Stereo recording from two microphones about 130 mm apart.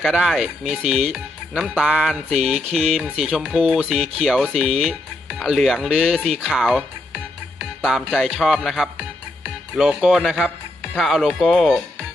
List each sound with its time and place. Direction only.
0.0 s speech: centre (ahead or behind)